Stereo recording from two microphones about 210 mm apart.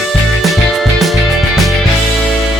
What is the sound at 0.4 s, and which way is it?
Music, centre (ahead or behind).